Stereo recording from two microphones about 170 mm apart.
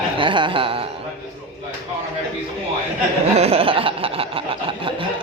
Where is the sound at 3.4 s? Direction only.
35° right (ahead or behind).